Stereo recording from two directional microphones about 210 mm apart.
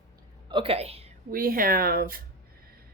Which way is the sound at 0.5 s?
25° right (ahead or behind).